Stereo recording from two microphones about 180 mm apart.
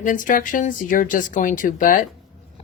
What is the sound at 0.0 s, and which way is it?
Speech, 45° left (ahead or behind).